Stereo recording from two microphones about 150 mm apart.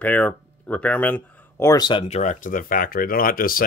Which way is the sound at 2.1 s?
50° left (ahead or behind).